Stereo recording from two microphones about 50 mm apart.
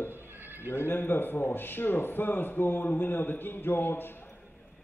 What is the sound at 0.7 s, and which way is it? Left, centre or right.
A man's voice, left.